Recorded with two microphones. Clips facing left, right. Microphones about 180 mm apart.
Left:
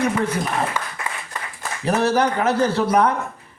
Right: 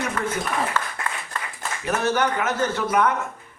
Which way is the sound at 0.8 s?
15° left (ahead or behind).